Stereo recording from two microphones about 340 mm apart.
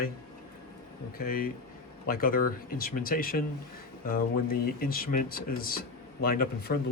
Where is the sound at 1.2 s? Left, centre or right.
Left.